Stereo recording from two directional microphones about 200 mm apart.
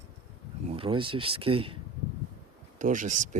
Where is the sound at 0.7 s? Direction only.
25° right (ahead or behind).